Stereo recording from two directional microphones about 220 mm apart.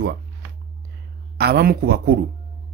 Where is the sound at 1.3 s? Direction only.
45° right (ahead or behind).